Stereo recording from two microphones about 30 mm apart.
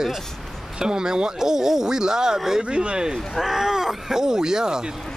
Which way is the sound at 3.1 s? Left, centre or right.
Centre.